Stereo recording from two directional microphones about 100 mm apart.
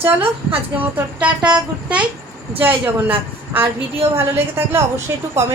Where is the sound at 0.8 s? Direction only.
15° right (ahead or behind).